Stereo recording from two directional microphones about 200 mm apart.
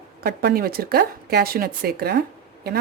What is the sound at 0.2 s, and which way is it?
Speech, 50° right (ahead or behind).